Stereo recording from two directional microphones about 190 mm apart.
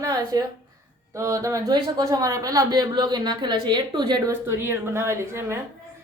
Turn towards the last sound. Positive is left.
turn(degrees=-15)  # may be behind; listen again after turning